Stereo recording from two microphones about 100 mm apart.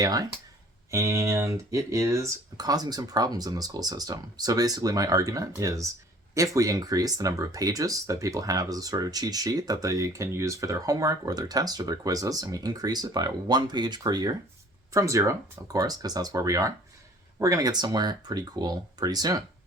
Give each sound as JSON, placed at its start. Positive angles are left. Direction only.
{"t": 0.0, "sound": "speech", "side_deg": -35}